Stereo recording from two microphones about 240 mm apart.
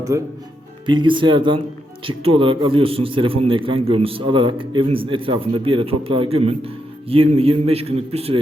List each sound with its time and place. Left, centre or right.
0.1 s a man's voice: centre